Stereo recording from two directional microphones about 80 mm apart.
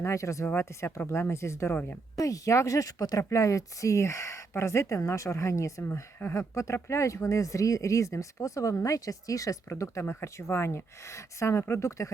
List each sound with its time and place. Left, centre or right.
0.0 s speech: left